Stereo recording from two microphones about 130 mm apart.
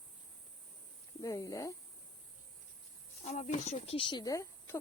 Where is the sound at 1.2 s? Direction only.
25° left (ahead or behind).